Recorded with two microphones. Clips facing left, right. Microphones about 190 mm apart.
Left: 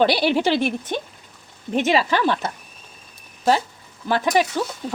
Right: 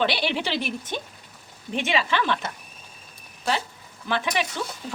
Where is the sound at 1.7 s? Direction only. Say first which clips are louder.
Left 6 dB; 40° left (ahead or behind).